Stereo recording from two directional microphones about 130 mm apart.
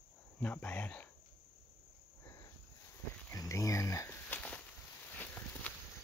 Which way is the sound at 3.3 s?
25° left (ahead or behind).